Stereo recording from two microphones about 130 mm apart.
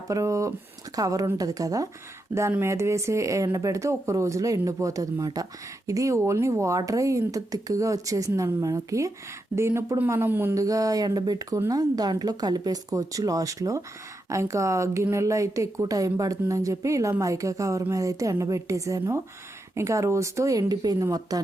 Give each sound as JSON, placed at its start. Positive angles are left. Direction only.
{"t": 0.1, "sound": "speech", "side_deg": -25}